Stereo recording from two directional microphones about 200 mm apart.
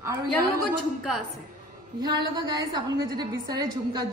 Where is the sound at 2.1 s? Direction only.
20° right (ahead or behind).